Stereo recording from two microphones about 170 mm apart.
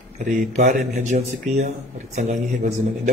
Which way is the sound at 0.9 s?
45° right (ahead or behind).